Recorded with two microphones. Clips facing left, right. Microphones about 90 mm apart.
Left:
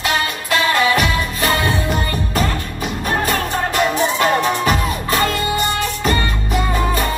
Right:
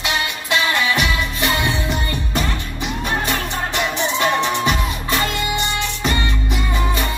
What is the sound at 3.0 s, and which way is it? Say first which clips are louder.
Music: left 4 dB; 45° left (ahead or behind).